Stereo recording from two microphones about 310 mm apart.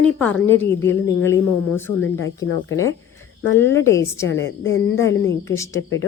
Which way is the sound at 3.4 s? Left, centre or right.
Centre.